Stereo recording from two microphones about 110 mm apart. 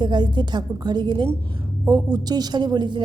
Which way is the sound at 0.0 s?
45° right (ahead or behind).